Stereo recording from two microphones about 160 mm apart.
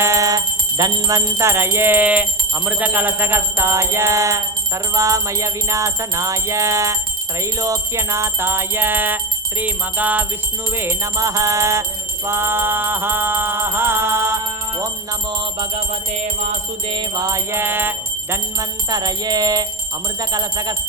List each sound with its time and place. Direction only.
0.0 s jingle bell: 20° right (ahead or behind)
4.9 s music: 20° right (ahead or behind)
7.6 s jingle bell: 20° right (ahead or behind)
16.2 s music: 55° right (ahead or behind)
16.9 s jingle bell: 25° right (ahead or behind)
18.9 s music: 25° right (ahead or behind)